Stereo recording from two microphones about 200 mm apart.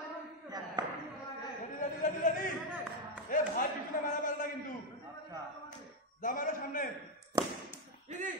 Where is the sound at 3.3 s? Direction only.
40° left (ahead or behind).